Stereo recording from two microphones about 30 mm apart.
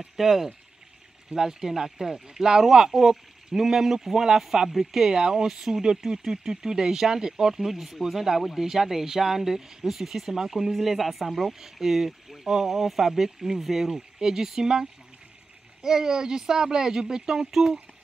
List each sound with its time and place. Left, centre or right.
0.2 s speech: centre
1.3 s speech: centre